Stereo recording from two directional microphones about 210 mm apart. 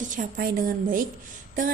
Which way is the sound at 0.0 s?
40° right (ahead or behind).